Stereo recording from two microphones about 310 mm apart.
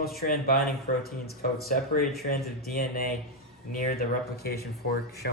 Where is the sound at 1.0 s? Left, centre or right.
Left.